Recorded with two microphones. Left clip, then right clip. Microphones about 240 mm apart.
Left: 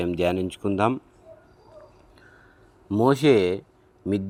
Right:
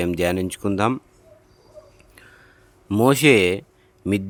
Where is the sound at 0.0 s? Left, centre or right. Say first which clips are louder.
Right 2 dB; right.